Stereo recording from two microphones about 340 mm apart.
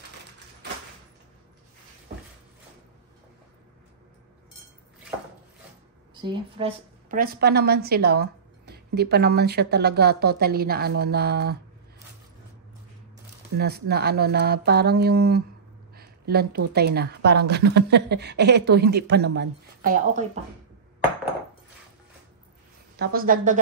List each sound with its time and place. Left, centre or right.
6.2 s a woman's voice: centre
13.6 s a woman's voice: right
22.9 s a woman's voice: right